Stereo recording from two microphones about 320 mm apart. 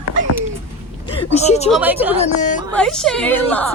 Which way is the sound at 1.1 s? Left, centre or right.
Centre.